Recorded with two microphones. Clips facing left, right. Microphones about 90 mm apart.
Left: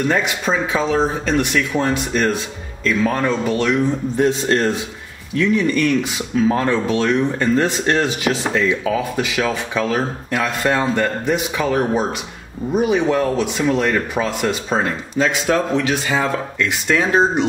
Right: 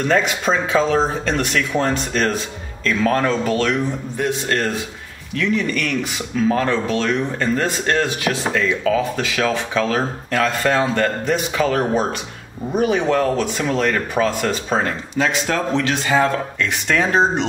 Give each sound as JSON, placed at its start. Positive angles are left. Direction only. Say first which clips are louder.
{"t": 0.1, "sound": "speech", "louder": "right 1 dB", "side_deg": 5}
{"t": 4.2, "sound": "a man's voice", "louder": "left 4 dB", "side_deg": 25}